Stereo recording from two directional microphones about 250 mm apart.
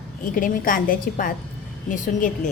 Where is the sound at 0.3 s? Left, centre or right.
Left.